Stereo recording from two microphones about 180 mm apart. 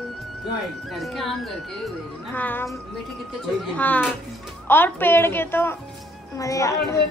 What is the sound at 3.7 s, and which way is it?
A woman's voice, 10° left (ahead or behind).